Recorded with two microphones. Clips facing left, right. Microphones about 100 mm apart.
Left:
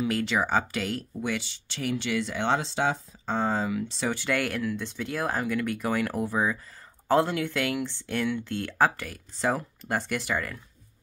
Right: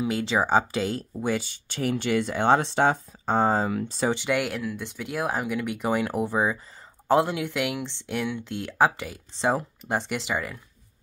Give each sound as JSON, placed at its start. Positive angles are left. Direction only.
{"t": 0.0, "sound": "speech", "side_deg": -25}
{"t": 4.1, "sound": "speech", "side_deg": -15}
{"t": 4.6, "sound": "speech", "side_deg": -5}